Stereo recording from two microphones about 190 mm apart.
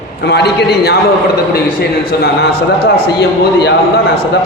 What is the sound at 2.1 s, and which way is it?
A man's voice, 60° left (ahead or behind).